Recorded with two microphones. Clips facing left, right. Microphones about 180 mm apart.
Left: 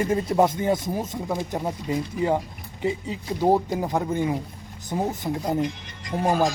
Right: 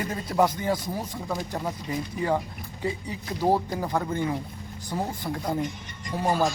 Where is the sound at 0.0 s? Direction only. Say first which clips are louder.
Left 4 dB; 25° left (ahead or behind).